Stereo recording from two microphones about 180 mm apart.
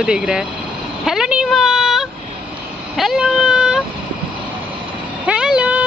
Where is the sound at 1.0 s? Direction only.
5° right (ahead or behind).